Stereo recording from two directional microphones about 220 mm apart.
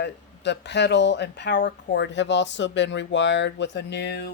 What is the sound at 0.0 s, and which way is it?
Speech, 50° left (ahead or behind).